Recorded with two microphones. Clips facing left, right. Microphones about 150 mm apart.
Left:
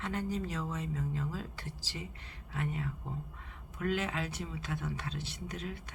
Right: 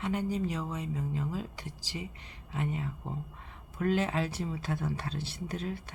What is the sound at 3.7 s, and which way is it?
Speech, 35° right (ahead or behind).